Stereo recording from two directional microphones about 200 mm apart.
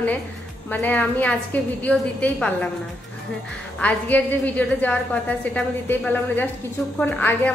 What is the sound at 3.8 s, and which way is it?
A woman's voice, 10° left (ahead or behind).